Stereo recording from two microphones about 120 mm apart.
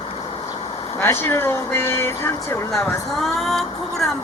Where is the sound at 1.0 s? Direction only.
20° left (ahead or behind).